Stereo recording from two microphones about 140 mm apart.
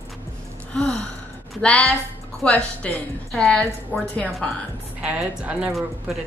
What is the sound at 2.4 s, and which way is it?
A woman's voice, 10° left (ahead or behind).